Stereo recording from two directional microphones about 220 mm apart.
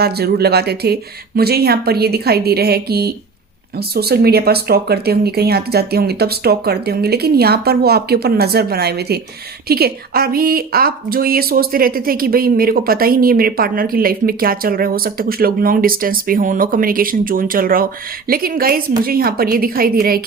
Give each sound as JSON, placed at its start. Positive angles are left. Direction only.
{"t": 0.0, "sound": "speech", "side_deg": -45}